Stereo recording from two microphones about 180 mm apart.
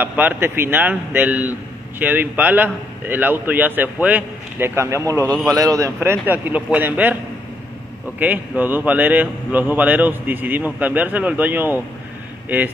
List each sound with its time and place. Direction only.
0.0 s speech: 10° right (ahead or behind)
8.2 s speech: 10° right (ahead or behind)